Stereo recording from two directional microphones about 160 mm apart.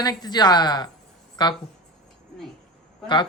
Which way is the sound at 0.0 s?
25° left (ahead or behind).